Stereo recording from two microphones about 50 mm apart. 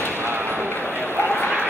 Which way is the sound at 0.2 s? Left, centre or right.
Right.